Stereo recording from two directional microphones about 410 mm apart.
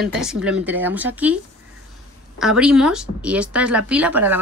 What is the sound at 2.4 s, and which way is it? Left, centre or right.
Speech, centre.